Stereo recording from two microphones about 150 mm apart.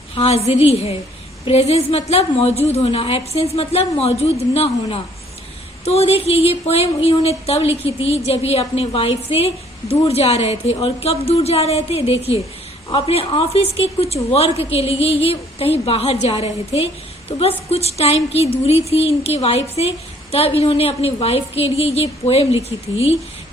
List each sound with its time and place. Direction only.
0.1 s a woman's voice: 40° left (ahead or behind)